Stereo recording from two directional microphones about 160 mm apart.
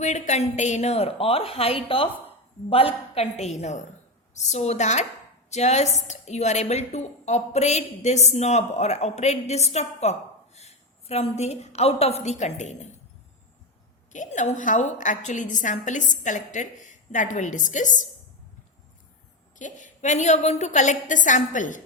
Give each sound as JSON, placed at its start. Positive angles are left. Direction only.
{"t": 0.0, "sound": "a woman's voice", "side_deg": 45}
{"t": 14.1, "sound": "a woman's voice", "side_deg": 50}
{"t": 19.5, "sound": "a woman's voice", "side_deg": 50}